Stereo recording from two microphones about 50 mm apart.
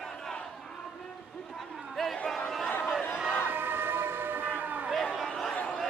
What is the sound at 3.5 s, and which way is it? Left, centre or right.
Siren, right.